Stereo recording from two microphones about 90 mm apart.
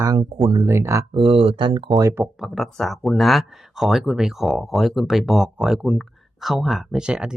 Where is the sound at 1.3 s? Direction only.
90° right; by 1.9 s 70° right (ahead or behind).